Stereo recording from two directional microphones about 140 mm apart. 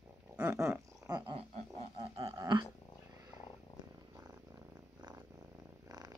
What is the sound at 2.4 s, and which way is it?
Dog, 25° right (ahead or behind).